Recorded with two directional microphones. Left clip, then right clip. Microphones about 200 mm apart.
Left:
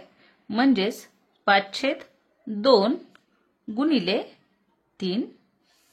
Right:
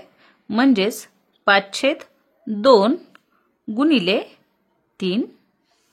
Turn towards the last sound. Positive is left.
turn(degrees=-25)  # may be behind; listen again after turning